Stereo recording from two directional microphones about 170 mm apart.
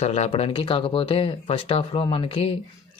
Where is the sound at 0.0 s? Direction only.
40° left (ahead or behind).